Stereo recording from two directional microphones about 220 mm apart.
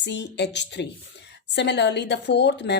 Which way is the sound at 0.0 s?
50° left (ahead or behind).